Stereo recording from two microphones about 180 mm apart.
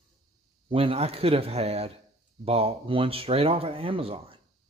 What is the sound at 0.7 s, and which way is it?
Speech, 30° right (ahead or behind).